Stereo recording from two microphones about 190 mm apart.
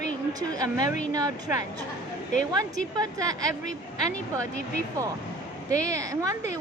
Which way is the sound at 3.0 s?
20° right (ahead or behind).